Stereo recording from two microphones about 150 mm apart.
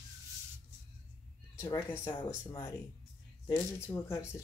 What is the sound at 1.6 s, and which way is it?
Speech, 20° left (ahead or behind).